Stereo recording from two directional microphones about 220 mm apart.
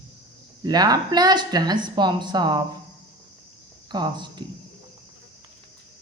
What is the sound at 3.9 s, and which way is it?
Speech, 20° right (ahead or behind).